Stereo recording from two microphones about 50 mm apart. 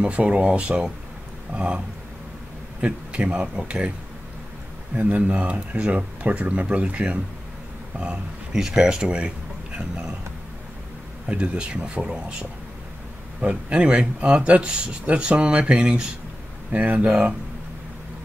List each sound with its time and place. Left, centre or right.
0.0 s speech: right
2.8 s speech: right
4.9 s speech: right
8.5 s speech: centre
11.2 s speech: right